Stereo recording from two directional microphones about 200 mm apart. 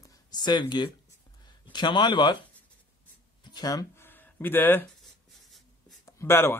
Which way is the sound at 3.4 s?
20° left (ahead or behind).